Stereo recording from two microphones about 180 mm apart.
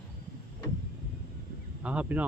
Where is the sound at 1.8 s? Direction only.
5° right (ahead or behind).